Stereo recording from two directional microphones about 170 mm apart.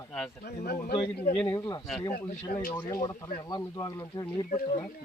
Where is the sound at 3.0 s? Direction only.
25° left (ahead or behind).